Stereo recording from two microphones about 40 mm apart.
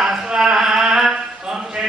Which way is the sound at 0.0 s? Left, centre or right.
Centre.